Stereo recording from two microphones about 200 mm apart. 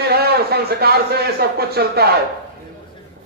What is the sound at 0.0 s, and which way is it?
A man's voice, 50° right (ahead or behind).